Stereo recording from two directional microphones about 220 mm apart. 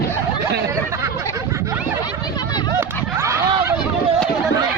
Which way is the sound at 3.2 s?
15° right (ahead or behind).